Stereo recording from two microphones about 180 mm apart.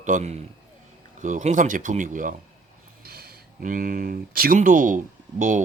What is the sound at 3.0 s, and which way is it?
Speech, 60° right (ahead or behind).